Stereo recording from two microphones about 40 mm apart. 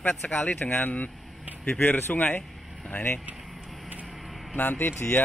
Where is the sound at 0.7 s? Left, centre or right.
Left.